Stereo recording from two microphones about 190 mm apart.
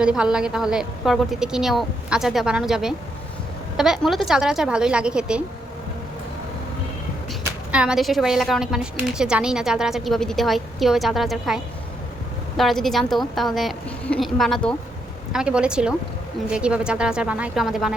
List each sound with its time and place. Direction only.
0.0 s a woman's voice: 5° right (ahead or behind)
7.7 s a woman's voice: 5° right (ahead or behind)